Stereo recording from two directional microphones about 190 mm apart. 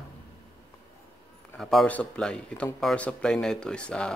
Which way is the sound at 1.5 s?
Centre (ahead or behind).